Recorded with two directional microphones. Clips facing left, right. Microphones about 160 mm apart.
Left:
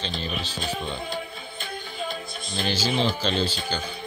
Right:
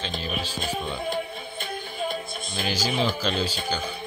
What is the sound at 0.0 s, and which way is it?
Speech, 10° right (ahead or behind).